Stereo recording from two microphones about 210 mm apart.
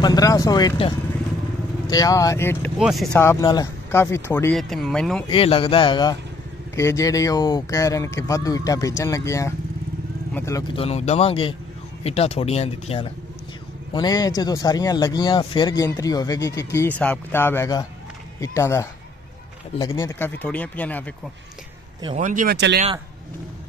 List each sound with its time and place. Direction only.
0.0 s speech: 15° left (ahead or behind)
2.8 s speech: centre (ahead or behind)
3.2 s speech: 15° left (ahead or behind)
4.6 s speech: centre (ahead or behind)
5.3 s speech: 25° left (ahead or behind)
10.8 s speech: 30° left (ahead or behind); by 21.1 s 10° left (ahead or behind)
22.0 s speech: 35° right (ahead or behind)